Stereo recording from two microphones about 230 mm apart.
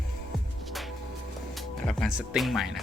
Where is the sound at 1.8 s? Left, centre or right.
Centre.